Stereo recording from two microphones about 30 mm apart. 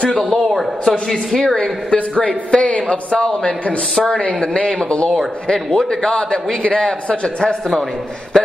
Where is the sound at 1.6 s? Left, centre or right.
Left.